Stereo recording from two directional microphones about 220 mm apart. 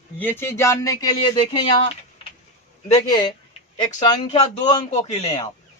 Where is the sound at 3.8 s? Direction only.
25° left (ahead or behind).